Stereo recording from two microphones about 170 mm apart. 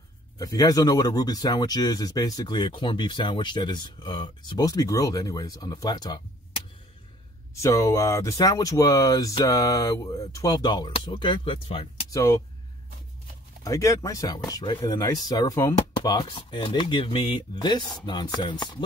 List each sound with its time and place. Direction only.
0.4 s speech: 20° left (ahead or behind)
7.5 s speech: 20° left (ahead or behind)
12.1 s speech: 20° left (ahead or behind)
13.7 s speech: 20° left (ahead or behind)